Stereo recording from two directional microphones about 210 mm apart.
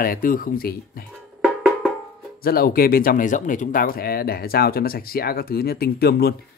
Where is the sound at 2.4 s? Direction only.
45° left (ahead or behind).